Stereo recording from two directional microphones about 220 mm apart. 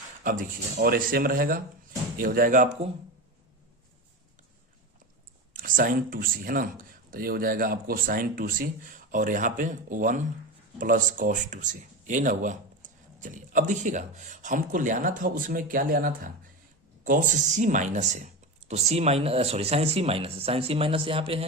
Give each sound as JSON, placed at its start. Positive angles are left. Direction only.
{"t": 0.3, "sound": "speech", "side_deg": -40}
{"t": 5.5, "sound": "speech", "side_deg": -40}